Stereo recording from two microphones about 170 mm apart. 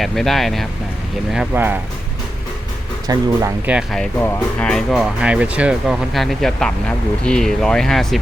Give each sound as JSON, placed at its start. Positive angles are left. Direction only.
{"t": 0.0, "sound": "speech", "side_deg": 0}
{"t": 3.1, "sound": "speech", "side_deg": -20}
{"t": 3.7, "sound": "speech", "side_deg": 0}
{"t": 4.2, "sound": "speech", "side_deg": 15}
{"t": 4.7, "sound": "speech", "side_deg": 0}